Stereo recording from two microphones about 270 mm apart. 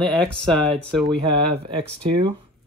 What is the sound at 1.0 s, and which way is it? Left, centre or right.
Speech, centre.